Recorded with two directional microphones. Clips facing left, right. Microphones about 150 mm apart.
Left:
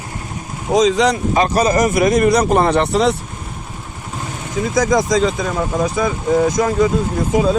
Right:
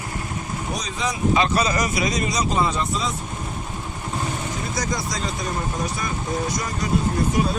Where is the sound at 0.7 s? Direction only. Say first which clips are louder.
Left 16 dB; 90° left.